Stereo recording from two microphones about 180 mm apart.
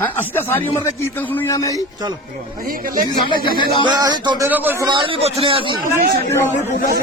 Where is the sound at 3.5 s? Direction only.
25° left (ahead or behind).